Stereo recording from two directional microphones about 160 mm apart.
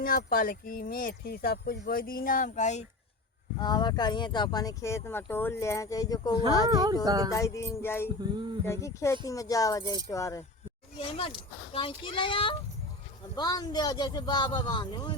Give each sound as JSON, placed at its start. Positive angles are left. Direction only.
{"t": 0.0, "sound": "speech", "side_deg": 65}
{"t": 3.6, "sound": "speech", "side_deg": 25}
{"t": 6.7, "sound": "speech", "side_deg": -25}
{"t": 7.3, "sound": "music", "side_deg": 20}
{"t": 9.2, "sound": "speech", "side_deg": 20}
{"t": 10.9, "sound": "a child's voice", "side_deg": 35}